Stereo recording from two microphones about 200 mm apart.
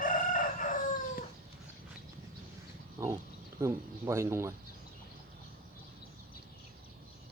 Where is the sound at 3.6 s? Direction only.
15° right (ahead or behind).